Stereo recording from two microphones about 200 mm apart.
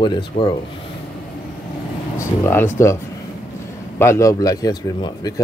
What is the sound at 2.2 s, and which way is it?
Speech, 10° left (ahead or behind).